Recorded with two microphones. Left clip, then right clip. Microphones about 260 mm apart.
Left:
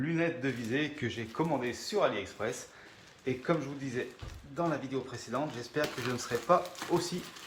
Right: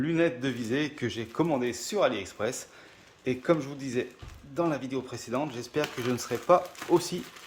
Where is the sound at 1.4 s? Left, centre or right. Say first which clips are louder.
Right 5 dB; right.